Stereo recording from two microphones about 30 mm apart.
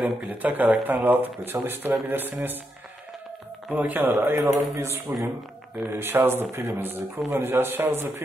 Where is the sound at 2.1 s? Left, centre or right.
Right.